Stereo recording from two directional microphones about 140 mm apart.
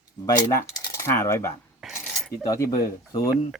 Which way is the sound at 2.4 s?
25° left (ahead or behind).